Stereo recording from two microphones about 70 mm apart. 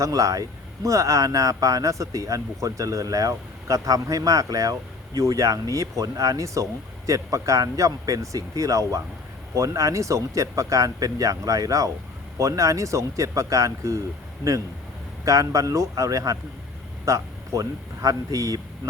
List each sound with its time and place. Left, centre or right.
0.0 s speech: right
15.2 s speech: right